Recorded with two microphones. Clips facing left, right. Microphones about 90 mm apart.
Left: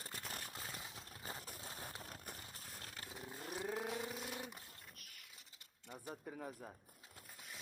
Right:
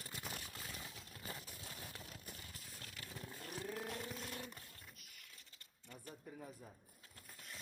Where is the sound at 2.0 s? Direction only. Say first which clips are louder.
Left 2 dB; 45° left (ahead or behind).